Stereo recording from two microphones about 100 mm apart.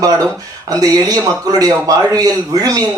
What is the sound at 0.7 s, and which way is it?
A man's voice, 35° right (ahead or behind).